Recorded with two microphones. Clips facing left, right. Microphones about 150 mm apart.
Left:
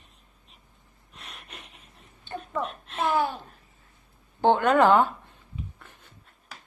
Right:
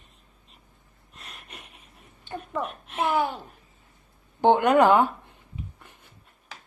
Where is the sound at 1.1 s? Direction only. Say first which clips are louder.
Even; centre (ahead or behind).